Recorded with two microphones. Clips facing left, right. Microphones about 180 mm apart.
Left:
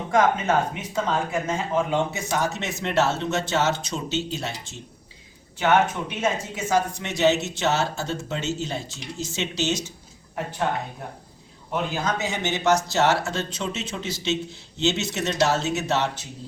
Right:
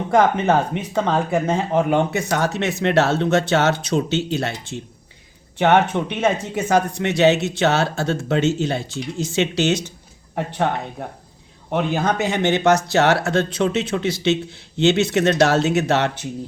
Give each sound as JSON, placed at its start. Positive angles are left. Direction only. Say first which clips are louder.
{"t": 0.1, "sound": "speech", "louder": "right 4 dB", "side_deg": -65}
{"t": 11.7, "sound": "speech", "louder": "right 6 dB", "side_deg": -60}